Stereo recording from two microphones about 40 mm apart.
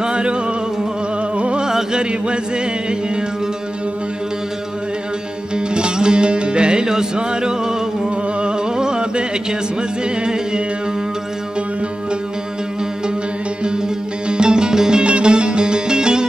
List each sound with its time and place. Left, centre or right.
0.0 s music: right
1.7 s chant: centre
5.7 s music: right
14.3 s music: right